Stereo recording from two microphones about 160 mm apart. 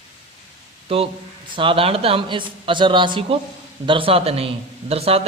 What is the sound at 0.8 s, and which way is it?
A man's voice, 35° right (ahead or behind).